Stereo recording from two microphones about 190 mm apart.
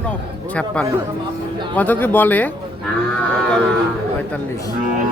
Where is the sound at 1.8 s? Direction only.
10° left (ahead or behind).